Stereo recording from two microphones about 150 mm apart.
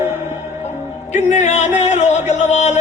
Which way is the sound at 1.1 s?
55° left (ahead or behind).